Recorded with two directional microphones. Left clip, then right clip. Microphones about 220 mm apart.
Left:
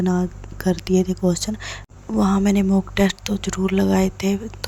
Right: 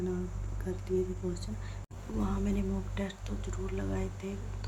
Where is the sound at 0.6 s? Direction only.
50° left (ahead or behind).